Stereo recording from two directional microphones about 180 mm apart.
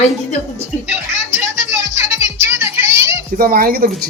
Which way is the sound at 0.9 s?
10° right (ahead or behind).